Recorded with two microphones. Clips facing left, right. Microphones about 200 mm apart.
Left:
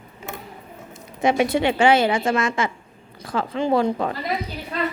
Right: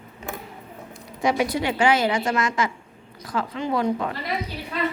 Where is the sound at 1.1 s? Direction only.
25° left (ahead or behind).